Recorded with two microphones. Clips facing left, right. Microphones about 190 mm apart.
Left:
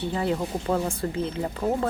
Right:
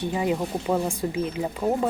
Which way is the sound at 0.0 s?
15° right (ahead or behind).